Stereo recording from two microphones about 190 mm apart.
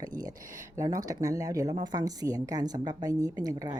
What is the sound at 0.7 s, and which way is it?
A woman's voice, 20° right (ahead or behind).